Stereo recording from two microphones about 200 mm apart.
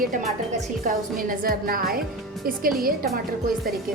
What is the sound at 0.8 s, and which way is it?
A woman's voice, 45° right (ahead or behind).